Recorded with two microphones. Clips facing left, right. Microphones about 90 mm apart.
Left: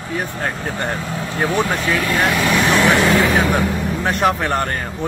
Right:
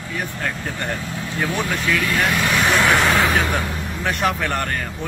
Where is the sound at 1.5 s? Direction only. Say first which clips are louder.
Left 6 dB; 50° left (ahead or behind).